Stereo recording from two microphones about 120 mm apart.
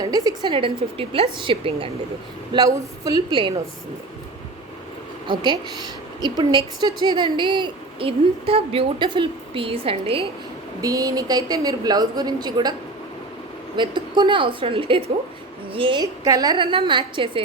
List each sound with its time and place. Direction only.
0.0 s a woman's voice: 35° right (ahead or behind)
0.5 s a woman's voice: 50° right (ahead or behind)
2.5 s a woman's voice: 30° right (ahead or behind)
5.3 s a woman's voice: 40° right (ahead or behind)
10.8 s a woman's voice: 30° right (ahead or behind)
13.7 s a woman's voice: 40° right (ahead or behind)
16.2 s a woman's voice: 30° right (ahead or behind)
16.7 s a woman's voice: 40° right (ahead or behind)